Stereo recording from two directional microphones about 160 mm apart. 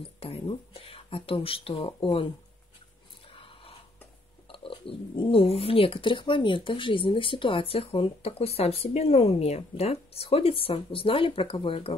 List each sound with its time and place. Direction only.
0.2 s speech: 35° left (ahead or behind)
3.3 s a sound: 35° left (ahead or behind)
4.5 s speech: 35° left (ahead or behind)